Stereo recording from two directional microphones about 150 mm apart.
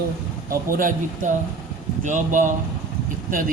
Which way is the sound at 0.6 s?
65° right (ahead or behind).